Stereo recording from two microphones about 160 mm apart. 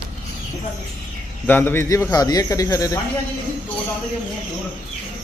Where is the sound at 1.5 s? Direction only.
10° left (ahead or behind).